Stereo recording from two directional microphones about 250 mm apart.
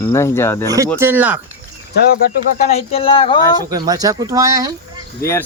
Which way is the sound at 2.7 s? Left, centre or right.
Left.